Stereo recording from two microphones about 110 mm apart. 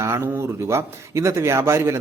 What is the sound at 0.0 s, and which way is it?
Speech, 25° right (ahead or behind).